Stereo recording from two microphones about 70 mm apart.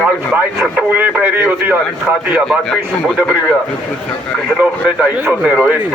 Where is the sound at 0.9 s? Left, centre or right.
Right.